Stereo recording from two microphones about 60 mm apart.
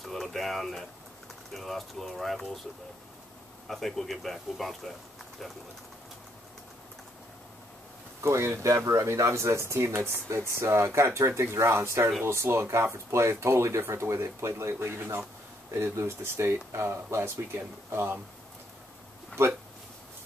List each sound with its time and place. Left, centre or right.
0.0 s a man's voice: centre
3.6 s a man's voice: centre
8.2 s speech: right
19.4 s speech: right